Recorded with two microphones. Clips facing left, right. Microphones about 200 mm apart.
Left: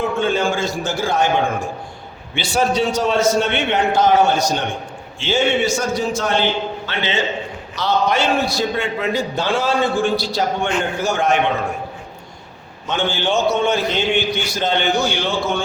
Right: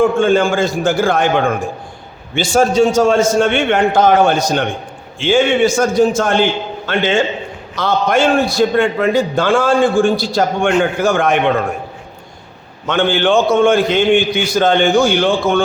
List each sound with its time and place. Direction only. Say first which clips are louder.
0.0 s a man's voice: right 7 dB; 50° right (ahead or behind)
12.9 s a man's voice: right 7 dB; 55° right (ahead or behind)